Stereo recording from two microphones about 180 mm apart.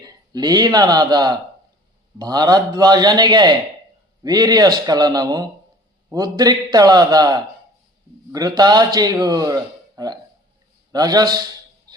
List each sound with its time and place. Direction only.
0.0 s a man's voice: 25° right (ahead or behind)